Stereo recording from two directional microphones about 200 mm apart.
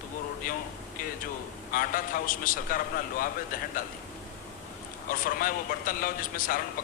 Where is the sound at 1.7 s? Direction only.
45° left (ahead or behind).